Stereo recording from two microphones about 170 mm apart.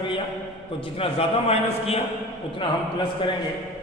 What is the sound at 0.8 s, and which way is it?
A man's voice, 35° left (ahead or behind).